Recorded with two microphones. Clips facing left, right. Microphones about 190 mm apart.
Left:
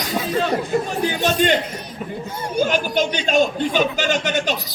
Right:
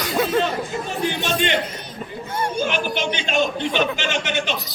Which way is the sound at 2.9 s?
40° left (ahead or behind).